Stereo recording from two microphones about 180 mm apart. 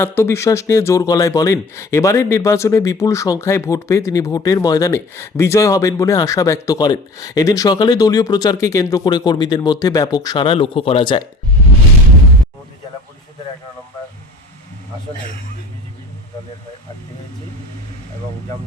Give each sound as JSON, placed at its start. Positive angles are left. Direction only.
{"t": 0.0, "sound": "speech", "side_deg": 15}